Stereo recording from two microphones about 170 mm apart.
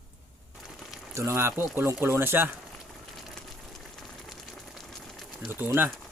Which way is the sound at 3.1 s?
Centre (ahead or behind).